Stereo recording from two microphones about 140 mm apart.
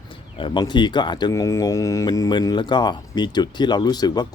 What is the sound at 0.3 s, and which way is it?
Speech, 35° left (ahead or behind).